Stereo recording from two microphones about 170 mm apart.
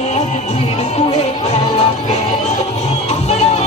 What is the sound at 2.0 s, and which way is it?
Music, 40° left (ahead or behind).